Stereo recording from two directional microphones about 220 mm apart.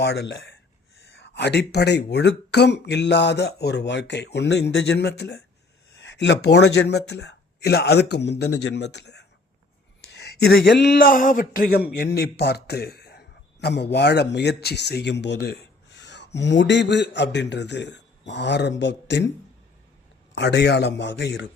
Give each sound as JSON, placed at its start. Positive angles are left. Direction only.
{"t": 0.0, "sound": "speech", "side_deg": 50}
{"t": 20.3, "sound": "speech", "side_deg": 50}